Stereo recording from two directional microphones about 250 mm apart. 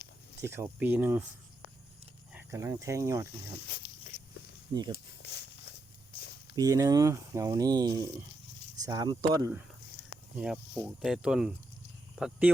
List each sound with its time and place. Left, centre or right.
0.4 s speech: centre
2.3 s speech: centre
4.9 s a sound: left
6.6 s speech: centre